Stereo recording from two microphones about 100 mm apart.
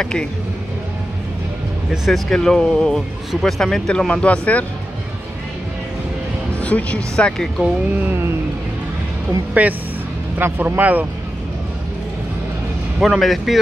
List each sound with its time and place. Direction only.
0.0 s speech: 10° left (ahead or behind)
1.9 s speech: centre (ahead or behind)
6.6 s speech: 15° left (ahead or behind)
7.9 s music: 15° right (ahead or behind)
9.5 s music: 15° right (ahead or behind)
10.3 s speech: 20° right (ahead or behind)
13.0 s speech: centre (ahead or behind)